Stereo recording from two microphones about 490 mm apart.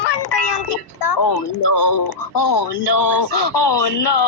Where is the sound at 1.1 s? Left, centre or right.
Left.